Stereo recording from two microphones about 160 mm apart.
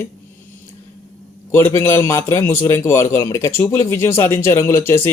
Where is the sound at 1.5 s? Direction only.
15° left (ahead or behind).